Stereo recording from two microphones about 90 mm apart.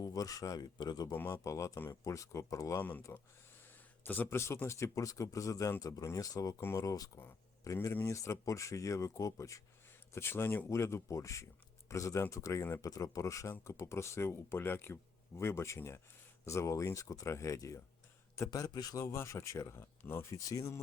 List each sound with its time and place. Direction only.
0.0 s speech: 40° left (ahead or behind)
1.5 s speech: 35° left (ahead or behind)
3.1 s speech: 25° left (ahead or behind); by 6.6 s 40° left (ahead or behind)
6.6 s speech: 25° left (ahead or behind)
6.8 s speech: 40° left (ahead or behind)
18.9 s speech: 30° left (ahead or behind)